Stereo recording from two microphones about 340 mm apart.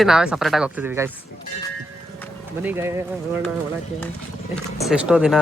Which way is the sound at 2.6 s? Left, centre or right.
Centre.